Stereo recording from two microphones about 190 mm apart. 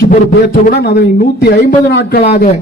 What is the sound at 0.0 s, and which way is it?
Speech, 50° left (ahead or behind).